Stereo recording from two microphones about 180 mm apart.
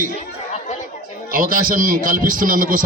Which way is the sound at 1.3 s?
50° right (ahead or behind).